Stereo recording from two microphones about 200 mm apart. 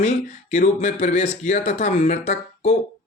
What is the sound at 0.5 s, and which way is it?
Speech, 35° left (ahead or behind).